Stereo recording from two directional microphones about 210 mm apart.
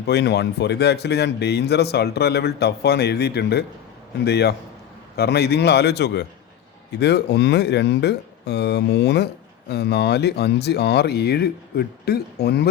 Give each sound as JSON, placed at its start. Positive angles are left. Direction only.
{"t": 0.0, "sound": "speech", "side_deg": 55}